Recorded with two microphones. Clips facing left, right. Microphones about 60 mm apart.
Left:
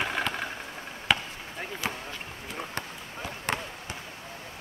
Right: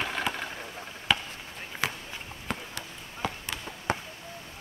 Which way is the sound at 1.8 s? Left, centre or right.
Right.